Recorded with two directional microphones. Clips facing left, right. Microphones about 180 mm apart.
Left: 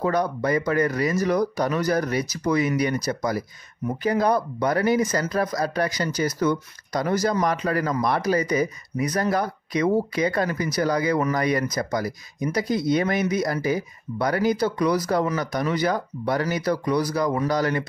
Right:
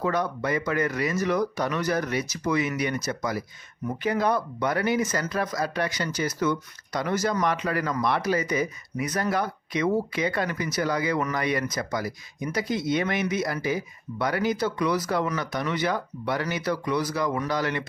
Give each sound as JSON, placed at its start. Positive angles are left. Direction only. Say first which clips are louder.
{"t": 0.0, "sound": "speech", "louder": "left 3 dB", "side_deg": 40}